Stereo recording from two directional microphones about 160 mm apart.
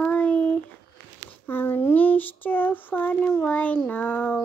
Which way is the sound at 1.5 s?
15° left (ahead or behind).